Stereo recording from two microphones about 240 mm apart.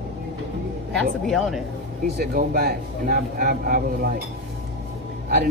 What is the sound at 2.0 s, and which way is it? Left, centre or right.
Speech, right.